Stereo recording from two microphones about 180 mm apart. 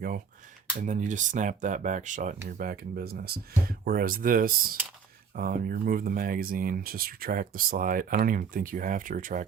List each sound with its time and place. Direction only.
0.8 s speech: 45° right (ahead or behind)